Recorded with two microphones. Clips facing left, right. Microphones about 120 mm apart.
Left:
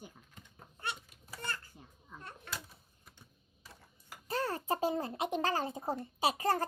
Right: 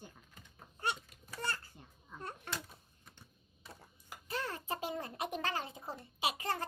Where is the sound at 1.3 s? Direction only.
35° right (ahead or behind).